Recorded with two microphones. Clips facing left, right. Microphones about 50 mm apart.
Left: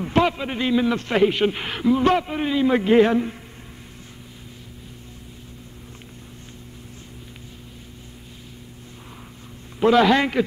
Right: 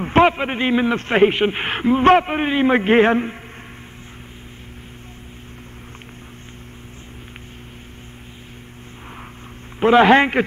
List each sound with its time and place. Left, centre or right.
0.0 s a man's voice: right
9.8 s a man's voice: right